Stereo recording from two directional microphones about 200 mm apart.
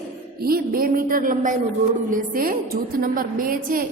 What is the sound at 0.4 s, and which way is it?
A woman's voice, 45° right (ahead or behind).